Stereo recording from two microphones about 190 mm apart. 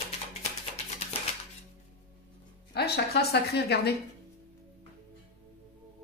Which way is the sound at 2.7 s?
55° left (ahead or behind).